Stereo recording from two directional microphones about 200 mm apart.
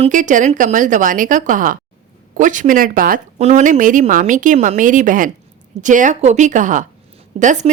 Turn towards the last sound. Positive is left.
turn(degrees=-40)  # may be behind; listen again after turning